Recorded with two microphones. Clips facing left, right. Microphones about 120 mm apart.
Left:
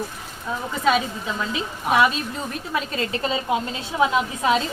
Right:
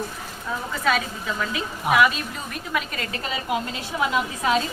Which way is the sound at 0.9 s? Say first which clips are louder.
Left 3 dB; 20° left (ahead or behind).